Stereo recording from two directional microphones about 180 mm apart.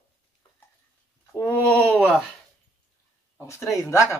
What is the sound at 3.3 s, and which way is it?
Speech, 15° left (ahead or behind).